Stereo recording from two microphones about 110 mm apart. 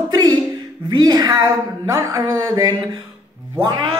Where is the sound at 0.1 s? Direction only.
35° right (ahead or behind).